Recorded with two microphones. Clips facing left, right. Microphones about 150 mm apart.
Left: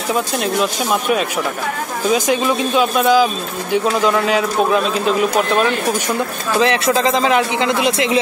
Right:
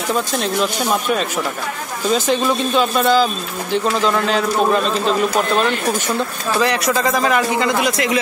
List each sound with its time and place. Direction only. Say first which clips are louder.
0.1 s speech: left 2 dB; 5° left (ahead or behind)
2.0 s speech: left 1 dB; 10° left (ahead or behind)
6.6 s a man's voice: left 3 dB; 20° left (ahead or behind)